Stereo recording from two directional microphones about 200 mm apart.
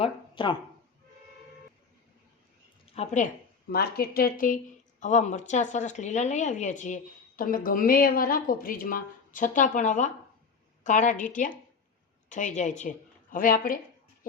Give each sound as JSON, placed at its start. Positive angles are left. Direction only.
{"t": 0.0, "sound": "a sound", "side_deg": 25}
{"t": 2.8, "sound": "a woman's voice", "side_deg": 30}
{"t": 3.7, "sound": "speech", "side_deg": 50}